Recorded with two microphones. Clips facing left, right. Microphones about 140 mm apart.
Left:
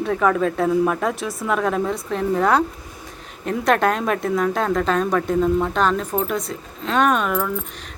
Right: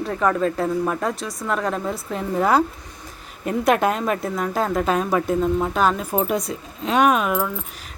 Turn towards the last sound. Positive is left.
turn(degrees=-5)  # may be behind; listen again after turning